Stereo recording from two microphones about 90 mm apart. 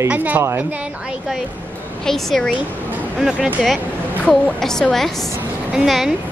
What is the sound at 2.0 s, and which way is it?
Speech, 5° left (ahead or behind).